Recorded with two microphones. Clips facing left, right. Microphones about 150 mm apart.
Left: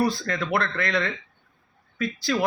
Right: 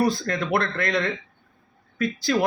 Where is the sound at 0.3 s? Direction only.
40° right (ahead or behind).